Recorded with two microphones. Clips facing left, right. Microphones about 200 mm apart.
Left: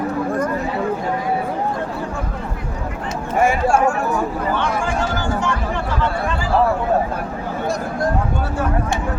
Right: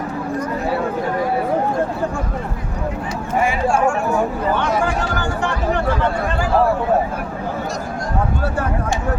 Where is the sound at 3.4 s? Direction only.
45° left (ahead or behind).